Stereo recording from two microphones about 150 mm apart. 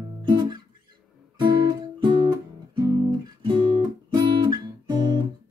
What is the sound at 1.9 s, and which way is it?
Guitar, 30° right (ahead or behind).